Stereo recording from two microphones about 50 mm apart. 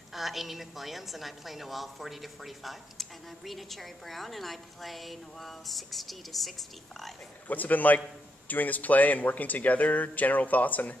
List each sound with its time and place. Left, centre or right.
0.1 s a woman's voice: centre
7.4 s speech: left